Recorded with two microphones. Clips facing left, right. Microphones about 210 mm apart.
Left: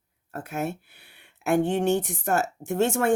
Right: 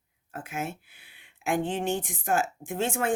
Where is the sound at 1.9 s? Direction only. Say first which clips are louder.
Left 4 dB; 70° left (ahead or behind).